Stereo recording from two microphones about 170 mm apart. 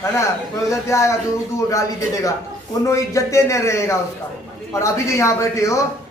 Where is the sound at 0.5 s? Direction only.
15° left (ahead or behind).